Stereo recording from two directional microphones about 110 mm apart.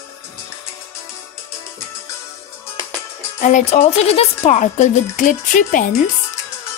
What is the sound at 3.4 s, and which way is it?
A woman's voice, 90° left.